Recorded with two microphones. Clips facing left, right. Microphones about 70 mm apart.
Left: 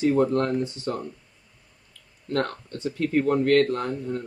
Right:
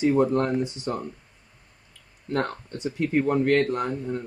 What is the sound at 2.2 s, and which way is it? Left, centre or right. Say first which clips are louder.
Speech: left 1 dB; centre.